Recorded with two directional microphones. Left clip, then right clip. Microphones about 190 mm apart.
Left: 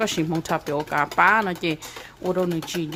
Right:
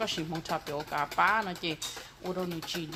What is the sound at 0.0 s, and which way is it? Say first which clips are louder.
Speech: left 9 dB; 45° left (ahead or behind).